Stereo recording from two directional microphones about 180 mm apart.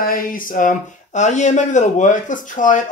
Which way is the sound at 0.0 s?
55° left (ahead or behind).